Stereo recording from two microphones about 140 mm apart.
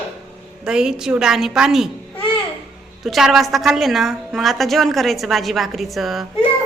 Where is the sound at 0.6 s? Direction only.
5° right (ahead or behind).